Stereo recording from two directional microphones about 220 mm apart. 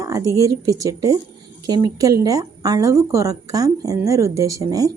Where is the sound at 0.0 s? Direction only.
15° right (ahead or behind).